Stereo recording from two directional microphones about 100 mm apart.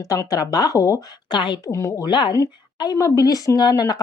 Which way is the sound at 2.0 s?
50° left (ahead or behind).